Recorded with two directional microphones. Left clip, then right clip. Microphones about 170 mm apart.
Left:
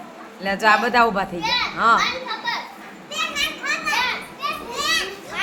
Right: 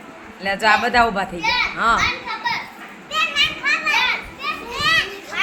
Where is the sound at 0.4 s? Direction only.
Centre (ahead or behind).